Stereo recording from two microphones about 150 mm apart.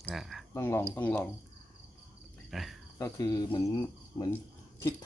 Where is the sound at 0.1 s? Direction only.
Centre (ahead or behind).